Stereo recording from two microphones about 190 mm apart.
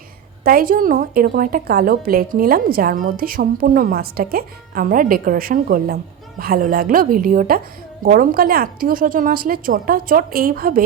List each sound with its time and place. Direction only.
0.4 s a woman's voice: 50° right (ahead or behind)